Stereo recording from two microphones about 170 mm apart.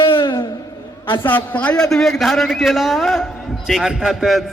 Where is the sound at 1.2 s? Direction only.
10° left (ahead or behind).